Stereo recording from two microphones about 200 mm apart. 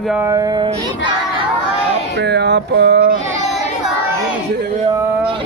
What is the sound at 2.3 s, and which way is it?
Music, 60° right (ahead or behind).